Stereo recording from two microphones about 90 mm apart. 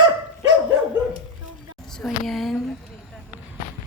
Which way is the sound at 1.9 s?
5° left (ahead or behind).